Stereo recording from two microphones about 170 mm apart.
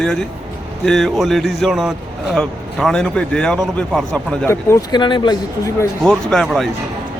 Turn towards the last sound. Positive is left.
turn(degrees=0)  # may be behind; listen again after turning